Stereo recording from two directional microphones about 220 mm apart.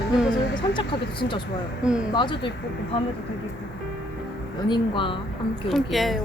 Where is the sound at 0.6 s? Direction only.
20° left (ahead or behind).